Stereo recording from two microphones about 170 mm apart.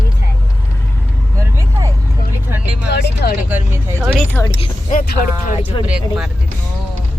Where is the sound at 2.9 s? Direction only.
70° left (ahead or behind).